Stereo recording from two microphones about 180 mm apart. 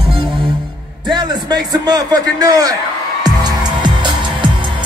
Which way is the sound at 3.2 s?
25° right (ahead or behind).